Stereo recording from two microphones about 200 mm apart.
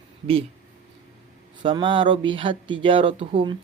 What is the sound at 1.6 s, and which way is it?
Speech, 25° right (ahead or behind).